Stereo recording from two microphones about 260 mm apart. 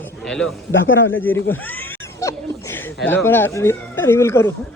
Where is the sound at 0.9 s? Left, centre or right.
Left.